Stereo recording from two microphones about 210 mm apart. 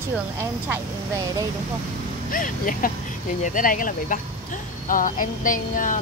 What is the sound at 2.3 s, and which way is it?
Speech, 40° left (ahead or behind).